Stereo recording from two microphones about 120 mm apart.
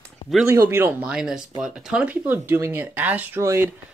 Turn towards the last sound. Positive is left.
turn(degrees=-25)  # may be behind; listen again after turning